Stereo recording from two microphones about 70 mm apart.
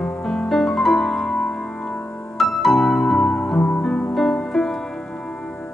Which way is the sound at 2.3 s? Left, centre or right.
Centre.